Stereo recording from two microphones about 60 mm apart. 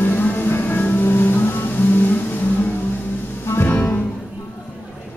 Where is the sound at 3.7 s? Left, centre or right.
Left.